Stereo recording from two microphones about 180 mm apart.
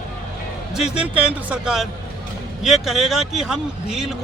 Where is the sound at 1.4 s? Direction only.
5° right (ahead or behind).